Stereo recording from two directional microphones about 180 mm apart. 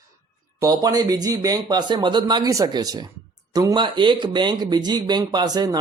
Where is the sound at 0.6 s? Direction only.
20° right (ahead or behind).